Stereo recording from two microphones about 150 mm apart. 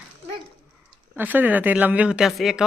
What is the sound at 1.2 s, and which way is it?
Speech, 10° right (ahead or behind).